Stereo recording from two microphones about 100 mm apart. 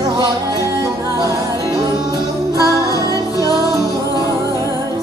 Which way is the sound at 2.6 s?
35° left (ahead or behind).